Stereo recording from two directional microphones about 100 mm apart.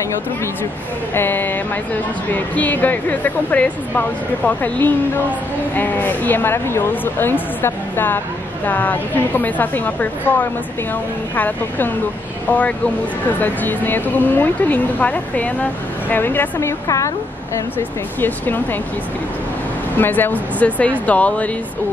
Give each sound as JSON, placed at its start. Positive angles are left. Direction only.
{"t": 1.1, "sound": "a woman's voice", "side_deg": 20}
{"t": 5.8, "sound": "a woman's voice", "side_deg": 20}
{"t": 18.2, "sound": "a woman's voice", "side_deg": 20}
{"t": 20.0, "sound": "a woman's voice", "side_deg": 20}